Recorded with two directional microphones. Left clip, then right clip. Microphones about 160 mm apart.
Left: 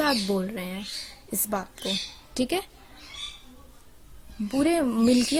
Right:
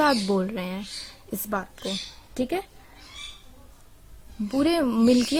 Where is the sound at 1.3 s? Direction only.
10° right (ahead or behind).